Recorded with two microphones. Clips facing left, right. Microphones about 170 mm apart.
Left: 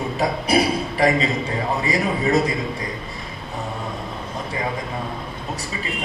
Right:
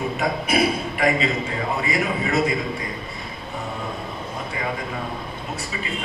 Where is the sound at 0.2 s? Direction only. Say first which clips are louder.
Left 2 dB; 35° left (ahead or behind).